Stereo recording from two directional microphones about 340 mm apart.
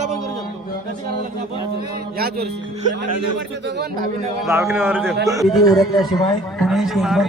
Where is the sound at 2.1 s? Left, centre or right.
Right.